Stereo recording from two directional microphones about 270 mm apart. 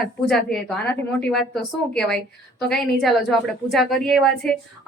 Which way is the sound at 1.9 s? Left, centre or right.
Centre.